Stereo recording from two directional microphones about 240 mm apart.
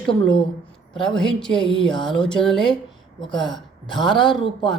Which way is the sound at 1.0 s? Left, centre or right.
Centre.